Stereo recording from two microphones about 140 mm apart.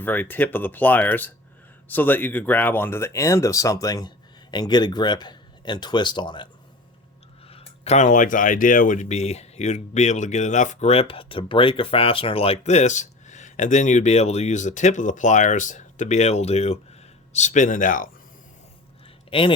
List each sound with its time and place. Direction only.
0.0 s speech: 15° left (ahead or behind); by 6.5 s 35° left (ahead or behind)
7.4 s speech: 45° left (ahead or behind)
17.3 s speech: 60° left (ahead or behind)
19.3 s speech: 40° left (ahead or behind)